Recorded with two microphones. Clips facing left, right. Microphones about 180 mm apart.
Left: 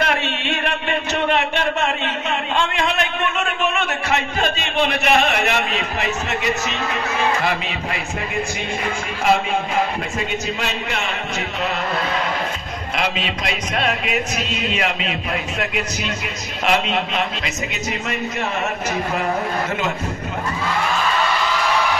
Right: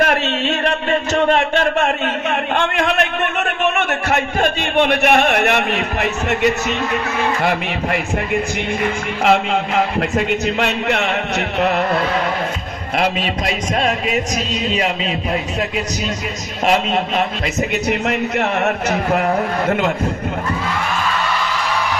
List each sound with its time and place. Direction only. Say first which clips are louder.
0.0 s a sound: right 5 dB; 45° right (ahead or behind)
2.5 s a sound: right 3 dB; 55° right (ahead or behind)
4.1 s a man's voice: right 4 dB; 55° right (ahead or behind)
9.2 s a man's voice: right 3 dB; 70° right (ahead or behind)
12.9 s a man's voice: right 5 dB; 45° right (ahead or behind)
17.8 s a man's voice: right 6 dB; 65° right (ahead or behind)